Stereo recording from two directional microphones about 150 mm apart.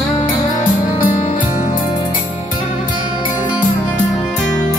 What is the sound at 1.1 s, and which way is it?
Music, 50° left (ahead or behind).